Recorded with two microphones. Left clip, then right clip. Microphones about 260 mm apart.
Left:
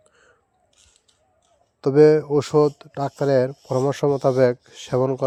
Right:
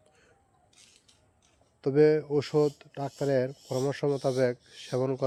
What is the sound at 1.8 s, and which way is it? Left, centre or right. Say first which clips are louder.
Speech: left 9 dB; left.